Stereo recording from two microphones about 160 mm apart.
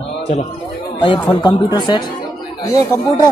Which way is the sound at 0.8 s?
30° left (ahead or behind).